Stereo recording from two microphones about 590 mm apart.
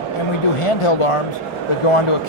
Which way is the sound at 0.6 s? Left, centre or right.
Left.